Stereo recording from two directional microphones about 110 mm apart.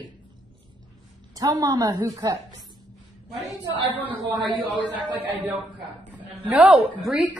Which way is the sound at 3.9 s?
15° right (ahead or behind).